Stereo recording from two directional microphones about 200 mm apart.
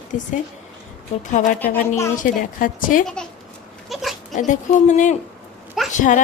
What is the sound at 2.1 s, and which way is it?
Speech, 40° left (ahead or behind).